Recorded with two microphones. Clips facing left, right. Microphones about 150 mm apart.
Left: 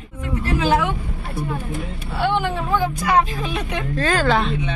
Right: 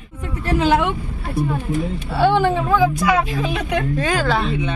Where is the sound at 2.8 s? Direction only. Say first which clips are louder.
Right 5 dB; 90° right.